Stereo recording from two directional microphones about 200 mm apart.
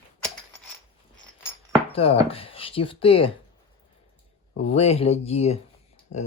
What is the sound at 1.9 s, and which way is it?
Speech, 30° left (ahead or behind).